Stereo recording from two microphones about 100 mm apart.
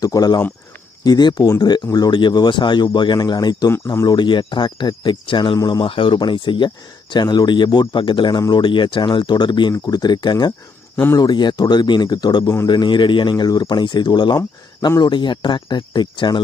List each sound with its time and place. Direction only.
0.0 s speech: 40° left (ahead or behind)
8.4 s speech: 40° left (ahead or behind)
8.6 s speech: 55° left (ahead or behind)